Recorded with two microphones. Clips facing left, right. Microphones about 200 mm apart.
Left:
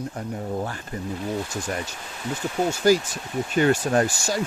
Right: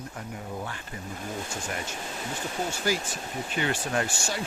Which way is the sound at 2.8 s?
40° left (ahead or behind).